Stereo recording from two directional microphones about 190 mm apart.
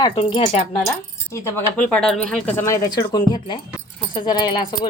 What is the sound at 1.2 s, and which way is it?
Speech, 15° left (ahead or behind).